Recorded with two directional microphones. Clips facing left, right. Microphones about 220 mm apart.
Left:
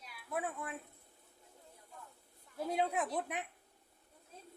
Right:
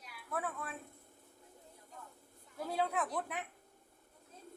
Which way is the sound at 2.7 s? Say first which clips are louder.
Left 1 dB; 20° left (ahead or behind).